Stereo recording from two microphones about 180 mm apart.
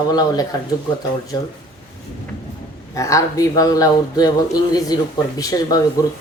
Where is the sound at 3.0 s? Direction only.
15° left (ahead or behind).